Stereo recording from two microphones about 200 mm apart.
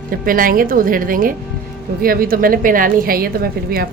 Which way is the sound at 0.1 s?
45° right (ahead or behind).